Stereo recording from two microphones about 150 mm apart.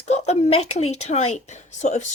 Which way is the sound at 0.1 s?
45° left (ahead or behind).